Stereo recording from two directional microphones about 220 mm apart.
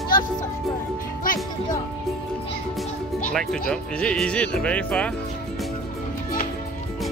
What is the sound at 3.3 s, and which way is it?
Speech, 5° left (ahead or behind).